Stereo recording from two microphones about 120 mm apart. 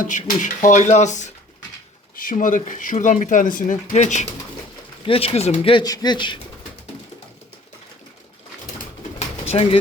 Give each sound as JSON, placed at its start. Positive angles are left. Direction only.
{"t": 0.0, "sound": "speech", "side_deg": 90}
{"t": 2.3, "sound": "speech", "side_deg": 90}
{"t": 5.0, "sound": "speech", "side_deg": 55}
{"t": 5.7, "sound": "speech", "side_deg": 35}
{"t": 9.1, "sound": "bird", "side_deg": 60}